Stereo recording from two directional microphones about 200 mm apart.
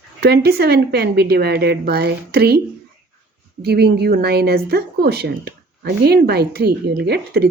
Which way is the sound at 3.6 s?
55° right (ahead or behind).